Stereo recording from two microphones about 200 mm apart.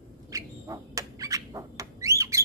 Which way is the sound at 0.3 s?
15° right (ahead or behind).